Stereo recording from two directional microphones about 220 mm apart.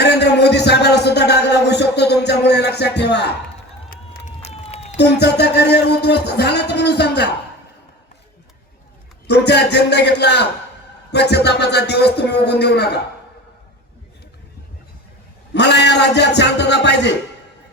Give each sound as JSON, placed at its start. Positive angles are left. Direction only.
{"t": 0.0, "sound": "a sound", "side_deg": 50}
{"t": 3.8, "sound": "crowd", "side_deg": 45}
{"t": 4.4, "sound": "run", "side_deg": 30}
{"t": 4.9, "sound": "speech", "side_deg": 50}
{"t": 9.2, "sound": "speech", "side_deg": 50}
{"t": 15.5, "sound": "speech", "side_deg": 50}